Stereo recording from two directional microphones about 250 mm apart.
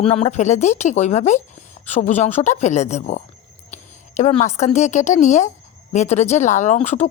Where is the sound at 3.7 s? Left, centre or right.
Left.